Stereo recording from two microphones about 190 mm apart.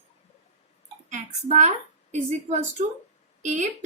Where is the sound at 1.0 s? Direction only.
40° right (ahead or behind).